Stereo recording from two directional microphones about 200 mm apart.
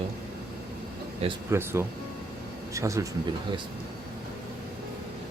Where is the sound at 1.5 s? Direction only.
10° right (ahead or behind).